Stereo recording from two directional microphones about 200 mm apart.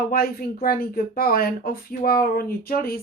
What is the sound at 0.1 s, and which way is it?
Speech, 50° left (ahead or behind).